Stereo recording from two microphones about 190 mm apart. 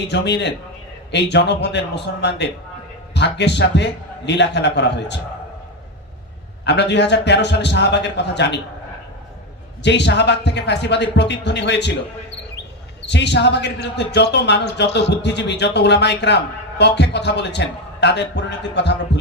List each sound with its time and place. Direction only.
0.1 s a man's voice: 65° left (ahead or behind)
3.2 s a man's voice: 65° left (ahead or behind)
6.7 s a man's voice: 65° left (ahead or behind)
9.8 s a man's voice: 65° left (ahead or behind)
13.1 s a man's voice: 65° left (ahead or behind)